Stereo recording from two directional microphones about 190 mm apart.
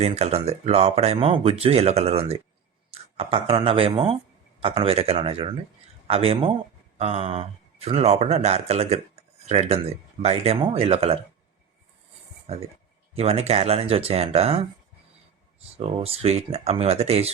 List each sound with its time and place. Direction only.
0.0 s speech: 35° right (ahead or behind)
12.5 s speech: 35° right (ahead or behind)
15.8 s speech: 30° right (ahead or behind)